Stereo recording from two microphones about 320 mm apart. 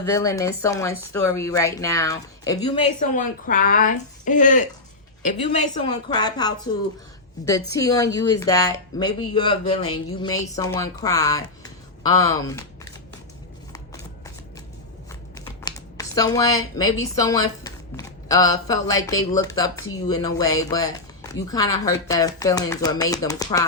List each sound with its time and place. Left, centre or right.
0.0 s a woman's voice: centre
7.7 s speech: centre
13.7 s shuffling cards: centre
15.4 s speech: centre